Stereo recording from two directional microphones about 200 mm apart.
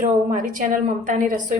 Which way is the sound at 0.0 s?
40° right (ahead or behind).